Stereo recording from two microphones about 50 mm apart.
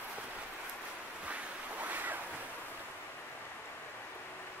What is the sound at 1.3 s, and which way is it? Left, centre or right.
Waves, right.